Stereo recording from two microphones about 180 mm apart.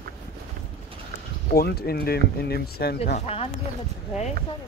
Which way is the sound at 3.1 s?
35° left (ahead or behind).